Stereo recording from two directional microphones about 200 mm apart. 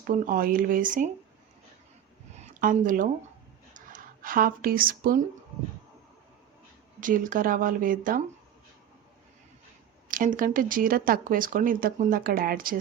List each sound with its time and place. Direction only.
0.1 s speech: 45° right (ahead or behind)
2.4 s speech: 40° right (ahead or behind)
7.0 s speech: 45° right (ahead or behind)
10.1 s speech: 40° right (ahead or behind)